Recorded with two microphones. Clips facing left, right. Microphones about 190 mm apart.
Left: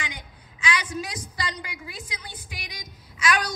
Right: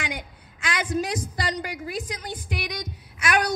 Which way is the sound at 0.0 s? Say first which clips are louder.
Right 5 dB; 55° right (ahead or behind).